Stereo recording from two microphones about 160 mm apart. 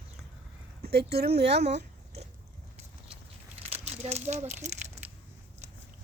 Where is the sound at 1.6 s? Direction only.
45° right (ahead or behind).